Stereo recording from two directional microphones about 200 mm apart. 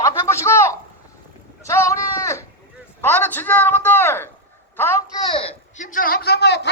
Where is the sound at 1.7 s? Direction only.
15° left (ahead or behind).